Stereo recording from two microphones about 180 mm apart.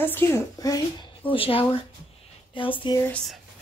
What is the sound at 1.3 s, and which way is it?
Speech, 30° left (ahead or behind).